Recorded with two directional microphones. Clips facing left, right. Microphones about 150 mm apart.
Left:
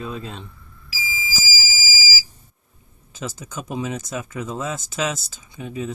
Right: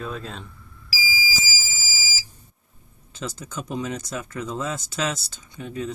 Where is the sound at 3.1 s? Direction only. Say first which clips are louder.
Left 1 dB; 5° left (ahead or behind).